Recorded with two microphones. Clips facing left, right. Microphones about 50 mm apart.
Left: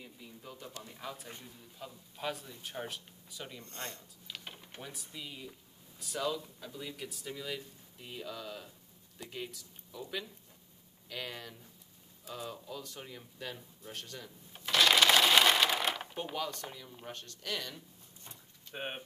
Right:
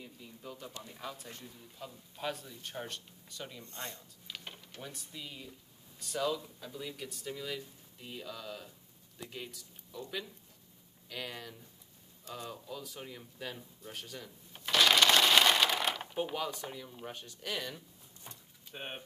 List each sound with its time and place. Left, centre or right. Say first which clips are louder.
0.0 s speech: right 2 dB; centre
3.6 s speech: even; left
4.8 s speech: even; centre
18.3 s door: left 4 dB; centre